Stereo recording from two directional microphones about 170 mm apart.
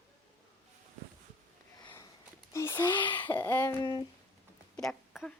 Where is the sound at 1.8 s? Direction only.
25° left (ahead or behind).